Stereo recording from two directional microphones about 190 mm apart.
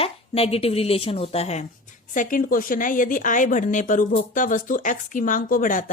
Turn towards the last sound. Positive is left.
turn(degrees=45)  # may be behind; listen again after turning